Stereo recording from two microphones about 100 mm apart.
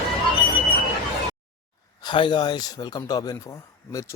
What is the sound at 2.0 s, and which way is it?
Speech, 50° left (ahead or behind).